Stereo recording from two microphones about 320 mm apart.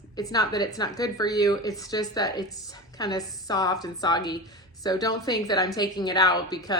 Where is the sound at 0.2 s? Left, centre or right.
Centre.